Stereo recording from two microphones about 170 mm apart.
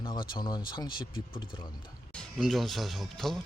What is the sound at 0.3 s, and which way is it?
Speech, 25° left (ahead or behind).